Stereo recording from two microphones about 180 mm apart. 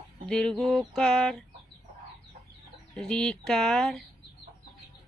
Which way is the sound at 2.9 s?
5° left (ahead or behind).